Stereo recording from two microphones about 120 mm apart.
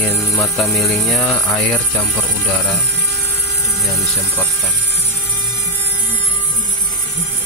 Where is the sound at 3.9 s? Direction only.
15° left (ahead or behind).